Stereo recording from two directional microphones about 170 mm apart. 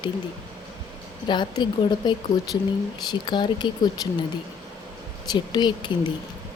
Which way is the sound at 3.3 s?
25° left (ahead or behind).